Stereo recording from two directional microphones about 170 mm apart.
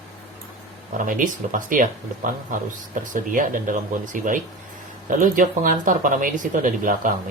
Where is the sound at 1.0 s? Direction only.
50° right (ahead or behind).